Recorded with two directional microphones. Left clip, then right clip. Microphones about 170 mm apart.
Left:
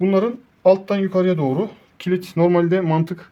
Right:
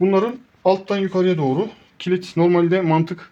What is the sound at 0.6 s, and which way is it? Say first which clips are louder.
Speech: left 3 dB; 10° right (ahead or behind).